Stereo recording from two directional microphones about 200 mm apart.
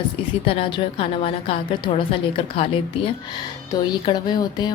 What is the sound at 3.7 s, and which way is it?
Speech, 20° left (ahead or behind).